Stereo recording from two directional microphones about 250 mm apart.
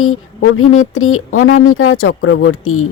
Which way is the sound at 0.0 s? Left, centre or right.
Left.